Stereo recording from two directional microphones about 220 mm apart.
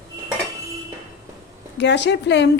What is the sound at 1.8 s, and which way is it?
Speech, 50° left (ahead or behind).